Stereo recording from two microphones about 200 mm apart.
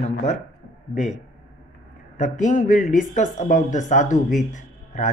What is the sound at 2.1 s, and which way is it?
A man's voice, 40° left (ahead or behind).